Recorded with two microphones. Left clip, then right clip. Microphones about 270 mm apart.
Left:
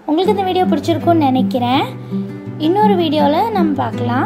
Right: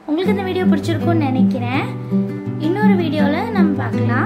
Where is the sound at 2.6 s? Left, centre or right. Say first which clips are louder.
Left 5 dB; centre.